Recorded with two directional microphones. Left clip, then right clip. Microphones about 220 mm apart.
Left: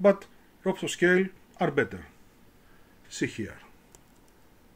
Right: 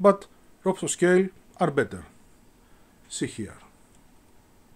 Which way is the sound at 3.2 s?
15° right (ahead or behind).